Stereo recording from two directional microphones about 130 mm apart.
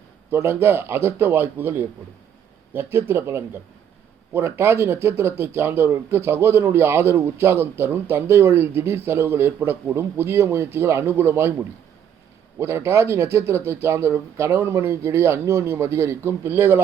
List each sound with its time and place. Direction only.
0.3 s a man's voice: 20° right (ahead or behind)
12.5 s a man's voice: 20° right (ahead or behind)